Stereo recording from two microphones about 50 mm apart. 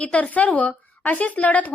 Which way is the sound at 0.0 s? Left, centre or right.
Left.